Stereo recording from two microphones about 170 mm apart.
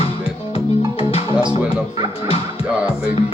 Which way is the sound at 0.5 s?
35° left (ahead or behind).